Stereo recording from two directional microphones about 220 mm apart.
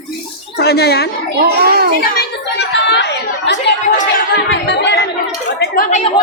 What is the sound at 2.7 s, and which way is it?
Chatter, 50° left (ahead or behind).